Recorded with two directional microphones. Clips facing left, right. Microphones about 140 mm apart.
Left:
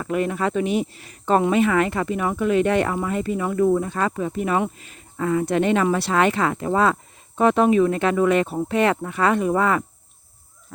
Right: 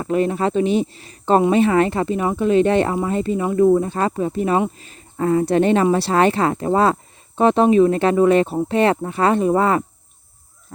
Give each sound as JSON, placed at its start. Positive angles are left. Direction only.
{"t": 0.0, "sound": "speech", "side_deg": -30}